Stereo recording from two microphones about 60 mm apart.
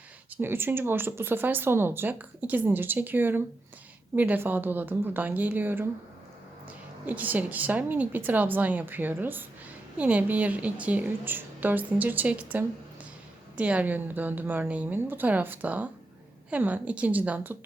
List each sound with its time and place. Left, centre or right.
0.3 s a woman's voice: right
10.0 s a woman's voice: right
11.3 s a woman's voice: right